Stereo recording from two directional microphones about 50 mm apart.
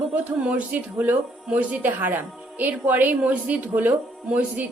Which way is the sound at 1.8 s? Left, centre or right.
Right.